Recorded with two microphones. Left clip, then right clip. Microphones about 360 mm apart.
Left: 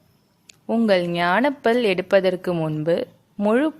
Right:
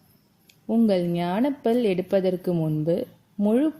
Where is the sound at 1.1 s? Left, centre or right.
Left.